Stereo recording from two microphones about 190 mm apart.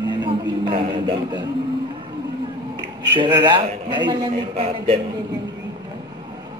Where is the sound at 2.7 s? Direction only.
25° right (ahead or behind).